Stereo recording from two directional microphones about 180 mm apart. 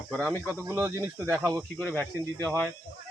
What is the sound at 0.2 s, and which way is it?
Speech, 10° right (ahead or behind).